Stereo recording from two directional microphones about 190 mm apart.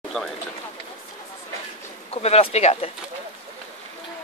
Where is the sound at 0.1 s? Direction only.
5° left (ahead or behind).